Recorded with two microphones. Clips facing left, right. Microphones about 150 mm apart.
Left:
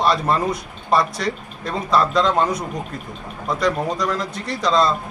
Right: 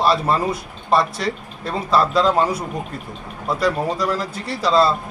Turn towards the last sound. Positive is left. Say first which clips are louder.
# right 1 dB
turn(degrees=-5)  # may be behind; listen again after turning